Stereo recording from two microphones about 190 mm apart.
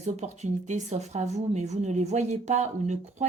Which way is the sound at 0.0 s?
35° right (ahead or behind).